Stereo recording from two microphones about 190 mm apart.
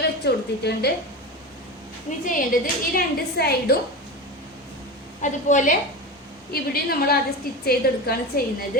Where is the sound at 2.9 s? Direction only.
55° left (ahead or behind).